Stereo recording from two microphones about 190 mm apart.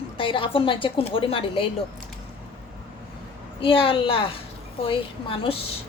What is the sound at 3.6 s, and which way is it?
A woman's voice, 30° left (ahead or behind).